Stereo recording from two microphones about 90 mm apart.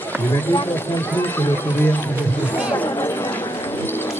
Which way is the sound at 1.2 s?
25° left (ahead or behind).